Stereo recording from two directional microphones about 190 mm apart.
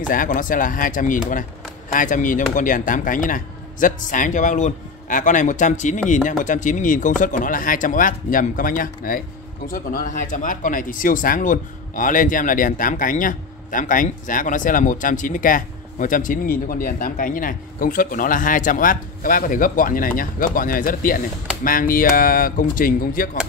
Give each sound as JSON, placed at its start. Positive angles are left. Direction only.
{"t": 0.1, "sound": "speech", "side_deg": 45}